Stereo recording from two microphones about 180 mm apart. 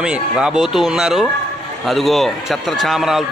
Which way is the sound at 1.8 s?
Centre (ahead or behind).